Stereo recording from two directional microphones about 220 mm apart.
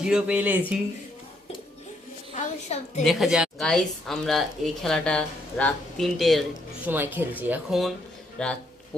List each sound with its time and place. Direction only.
0.0 s speech: 5° right (ahead or behind)
2.3 s a woman's voice: 30° left (ahead or behind)
3.0 s speech: centre (ahead or behind)